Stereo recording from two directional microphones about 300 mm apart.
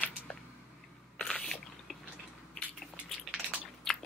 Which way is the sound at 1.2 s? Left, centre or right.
Centre.